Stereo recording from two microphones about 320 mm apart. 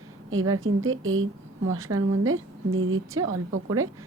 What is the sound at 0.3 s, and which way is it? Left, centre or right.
A woman's voice, right.